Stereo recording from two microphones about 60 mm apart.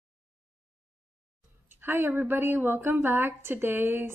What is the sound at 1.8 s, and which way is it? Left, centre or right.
A woman's voice, right.